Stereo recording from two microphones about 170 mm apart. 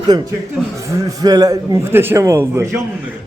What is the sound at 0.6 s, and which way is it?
Speech, centre (ahead or behind).